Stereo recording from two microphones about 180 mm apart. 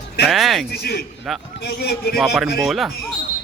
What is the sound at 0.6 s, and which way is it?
Speech, 60° left (ahead or behind).